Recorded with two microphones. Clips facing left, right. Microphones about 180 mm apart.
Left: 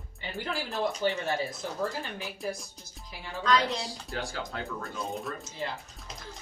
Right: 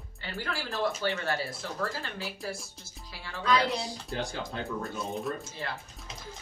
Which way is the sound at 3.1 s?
15° left (ahead or behind).